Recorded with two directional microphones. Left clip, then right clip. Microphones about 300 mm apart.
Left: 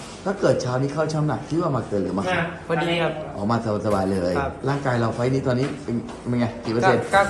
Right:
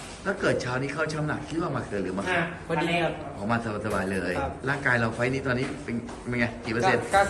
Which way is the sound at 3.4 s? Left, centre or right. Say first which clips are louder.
Left 5 dB; centre.